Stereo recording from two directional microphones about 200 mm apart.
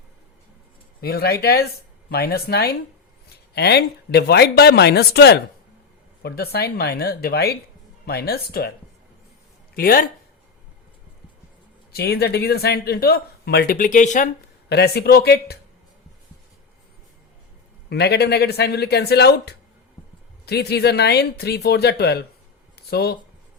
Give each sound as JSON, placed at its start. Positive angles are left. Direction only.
{"t": 1.0, "sound": "speech", "side_deg": 50}
{"t": 9.7, "sound": "speech", "side_deg": 45}
{"t": 11.9, "sound": "speech", "side_deg": 55}
{"t": 14.7, "sound": "speech", "side_deg": 55}
{"t": 17.8, "sound": "speech", "side_deg": 55}
{"t": 22.7, "sound": "a sound", "side_deg": 55}